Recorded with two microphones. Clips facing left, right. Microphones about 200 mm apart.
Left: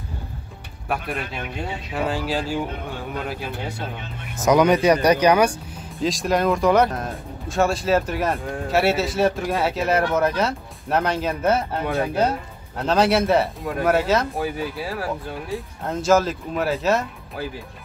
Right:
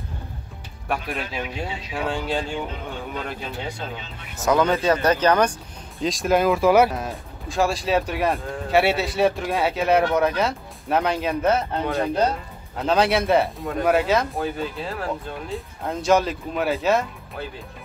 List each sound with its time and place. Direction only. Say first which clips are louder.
0.8 s speech: left 1 dB; centre (ahead or behind)